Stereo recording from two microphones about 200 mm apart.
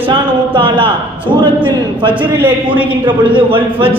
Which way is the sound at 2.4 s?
10° right (ahead or behind).